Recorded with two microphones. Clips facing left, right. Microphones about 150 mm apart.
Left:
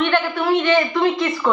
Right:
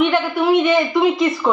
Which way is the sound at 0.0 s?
10° right (ahead or behind).